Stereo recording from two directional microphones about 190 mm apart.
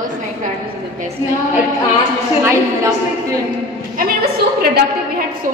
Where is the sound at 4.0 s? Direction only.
55° right (ahead or behind).